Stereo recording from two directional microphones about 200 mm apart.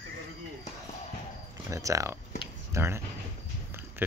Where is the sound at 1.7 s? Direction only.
15° right (ahead or behind).